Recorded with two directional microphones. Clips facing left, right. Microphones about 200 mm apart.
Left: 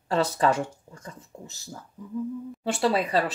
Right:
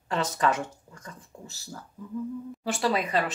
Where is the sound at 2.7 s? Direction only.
30° left (ahead or behind).